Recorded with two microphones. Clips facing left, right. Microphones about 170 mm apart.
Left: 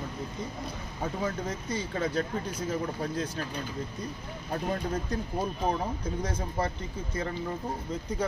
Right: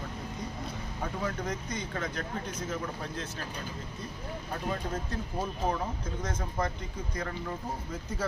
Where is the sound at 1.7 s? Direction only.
30° left (ahead or behind).